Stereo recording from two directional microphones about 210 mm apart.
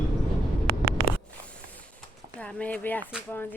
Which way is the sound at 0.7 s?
50° right (ahead or behind).